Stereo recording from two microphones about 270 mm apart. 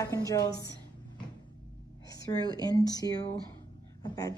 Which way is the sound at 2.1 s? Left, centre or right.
Centre.